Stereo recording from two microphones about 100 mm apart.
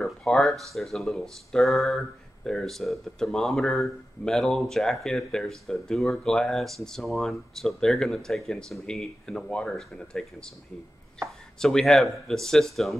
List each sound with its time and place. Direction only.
0.0 s speech: centre (ahead or behind)
11.6 s speech: 5° left (ahead or behind)